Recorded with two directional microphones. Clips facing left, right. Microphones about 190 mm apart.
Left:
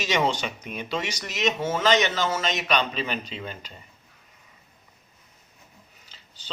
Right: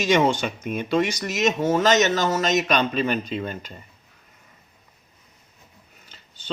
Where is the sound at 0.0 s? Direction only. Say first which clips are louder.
Right 5 dB; 50° right (ahead or behind).